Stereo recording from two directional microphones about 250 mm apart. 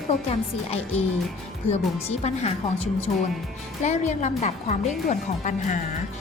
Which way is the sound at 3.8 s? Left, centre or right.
Left.